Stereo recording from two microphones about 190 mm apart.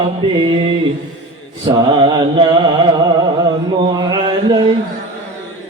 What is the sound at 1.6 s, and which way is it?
Mantra, 25° right (ahead or behind).